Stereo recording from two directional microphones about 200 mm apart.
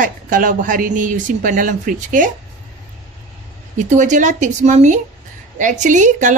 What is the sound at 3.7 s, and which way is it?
Speech, 40° right (ahead or behind).